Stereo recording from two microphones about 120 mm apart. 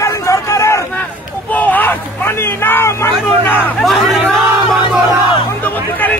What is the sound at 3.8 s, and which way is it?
Crowd, centre (ahead or behind).